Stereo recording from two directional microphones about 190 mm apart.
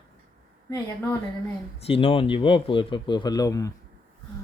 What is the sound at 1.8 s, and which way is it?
Speech, 30° left (ahead or behind).